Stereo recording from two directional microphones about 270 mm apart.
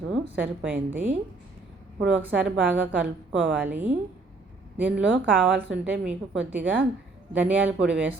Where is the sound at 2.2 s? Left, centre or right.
Centre.